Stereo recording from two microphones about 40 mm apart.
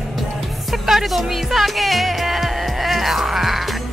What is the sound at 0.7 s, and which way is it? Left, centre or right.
Music, centre.